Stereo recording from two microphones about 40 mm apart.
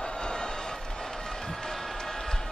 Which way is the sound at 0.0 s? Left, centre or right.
Centre.